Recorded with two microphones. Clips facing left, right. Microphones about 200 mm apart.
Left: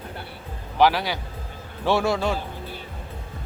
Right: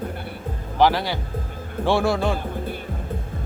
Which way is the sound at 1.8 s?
15° right (ahead or behind).